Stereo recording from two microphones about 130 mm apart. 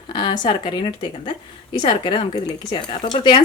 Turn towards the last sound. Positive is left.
turn(degrees=40)  # may be behind; listen again after turning